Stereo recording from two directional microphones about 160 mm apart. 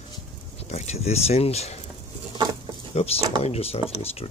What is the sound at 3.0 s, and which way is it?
Speech, 40° left (ahead or behind).